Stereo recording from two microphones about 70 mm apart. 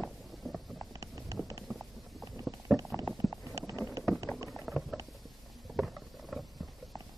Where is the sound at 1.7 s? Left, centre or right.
Centre.